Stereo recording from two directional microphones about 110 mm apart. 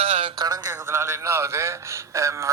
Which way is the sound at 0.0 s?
60° right (ahead or behind).